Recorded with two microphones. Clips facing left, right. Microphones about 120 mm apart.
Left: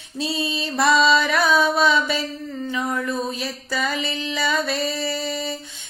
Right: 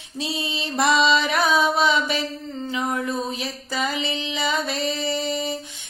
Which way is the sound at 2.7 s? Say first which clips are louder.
Even; 20° right (ahead or behind).